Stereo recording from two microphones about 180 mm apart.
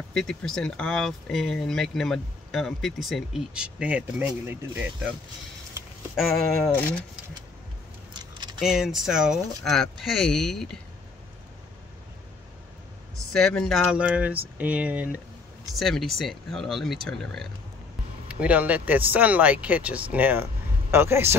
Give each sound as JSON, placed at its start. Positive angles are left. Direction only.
{"t": 0.1, "sound": "speech", "side_deg": 5}
{"t": 6.7, "sound": "speech", "side_deg": 10}
{"t": 8.1, "sound": "keys jangling", "side_deg": -25}
{"t": 8.5, "sound": "speech", "side_deg": 0}
{"t": 13.3, "sound": "speech", "side_deg": 5}
{"t": 13.9, "sound": "speech", "side_deg": -5}
{"t": 18.3, "sound": "speech", "side_deg": -10}